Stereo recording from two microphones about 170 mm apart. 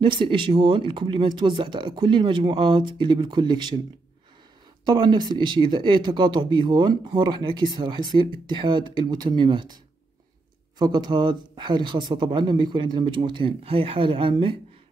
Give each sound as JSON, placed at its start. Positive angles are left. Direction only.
{"t": 0.0, "sound": "speech", "side_deg": -30}
{"t": 4.8, "sound": "speech", "side_deg": -25}
{"t": 10.8, "sound": "speech", "side_deg": -25}